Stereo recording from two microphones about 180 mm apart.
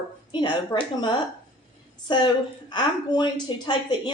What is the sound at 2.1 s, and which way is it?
Speech, 25° left (ahead or behind).